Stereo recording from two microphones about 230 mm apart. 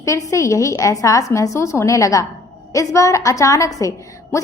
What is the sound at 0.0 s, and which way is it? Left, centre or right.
A woman's voice, centre.